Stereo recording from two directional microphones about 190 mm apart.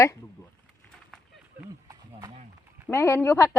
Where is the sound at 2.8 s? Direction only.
10° left (ahead or behind).